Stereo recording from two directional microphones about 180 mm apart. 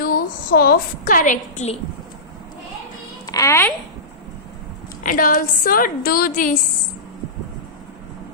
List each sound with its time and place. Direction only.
0.0 s a woman's voice: 55° left (ahead or behind); by 1.8 s 40° left (ahead or behind)
3.2 s speech: 20° left (ahead or behind)
5.0 s a woman's voice: 50° left (ahead or behind)